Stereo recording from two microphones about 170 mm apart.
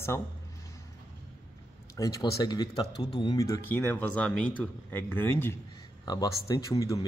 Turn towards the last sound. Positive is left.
turn(degrees=20)  # may be behind; listen again after turning